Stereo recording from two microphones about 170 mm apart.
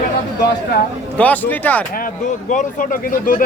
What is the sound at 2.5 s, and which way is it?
Speech, 50° left (ahead or behind).